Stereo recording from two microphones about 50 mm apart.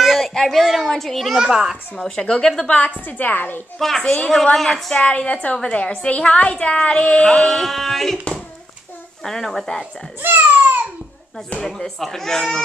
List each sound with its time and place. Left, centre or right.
0.0 s a sound: centre
0.3 s a sound: centre
0.6 s a woman's voice: centre
0.8 s a sound: centre
1.3 s a child's voice: centre
2.0 s speech: centre
3.1 s a woman's voice: left
3.7 s speech: centre
5.0 s a woman's voice: left
7.2 s a sound: centre
9.2 s speech: centre
10.2 s speech: right
11.6 s speech: centre